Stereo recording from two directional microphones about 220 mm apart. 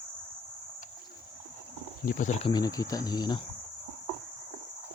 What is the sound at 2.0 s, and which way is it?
Speech, 35° left (ahead or behind).